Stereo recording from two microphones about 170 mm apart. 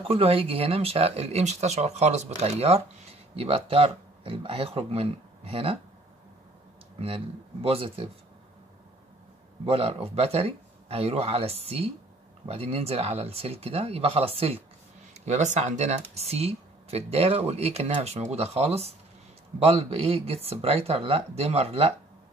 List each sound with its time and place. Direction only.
0.0 s speech: 35° right (ahead or behind)
7.6 s speech: 35° right (ahead or behind)
9.7 s speech: 35° right (ahead or behind)